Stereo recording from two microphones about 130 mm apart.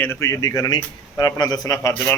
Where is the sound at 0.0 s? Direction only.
20° left (ahead or behind).